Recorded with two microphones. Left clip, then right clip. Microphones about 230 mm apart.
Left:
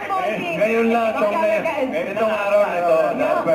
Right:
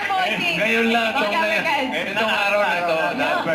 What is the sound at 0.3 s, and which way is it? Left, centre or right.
A man's voice, right.